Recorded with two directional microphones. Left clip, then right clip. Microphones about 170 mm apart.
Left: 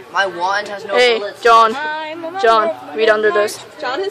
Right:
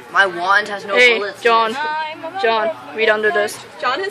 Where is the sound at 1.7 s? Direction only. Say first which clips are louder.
Even; 55° left (ahead or behind).